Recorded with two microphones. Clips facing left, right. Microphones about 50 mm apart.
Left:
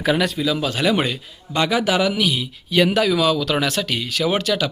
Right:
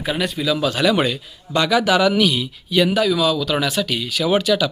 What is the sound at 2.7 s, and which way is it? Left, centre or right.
Speech, left.